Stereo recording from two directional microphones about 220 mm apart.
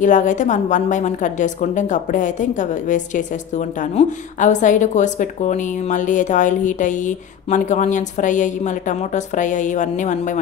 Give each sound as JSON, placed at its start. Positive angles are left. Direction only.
{"t": 0.0, "sound": "a woman's voice", "side_deg": 35}